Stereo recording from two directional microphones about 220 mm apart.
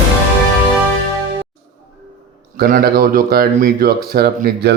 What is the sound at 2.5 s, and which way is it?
Speech, 40° right (ahead or behind).